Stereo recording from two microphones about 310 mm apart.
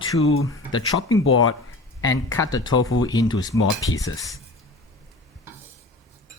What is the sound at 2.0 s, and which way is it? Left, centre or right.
Speech, centre.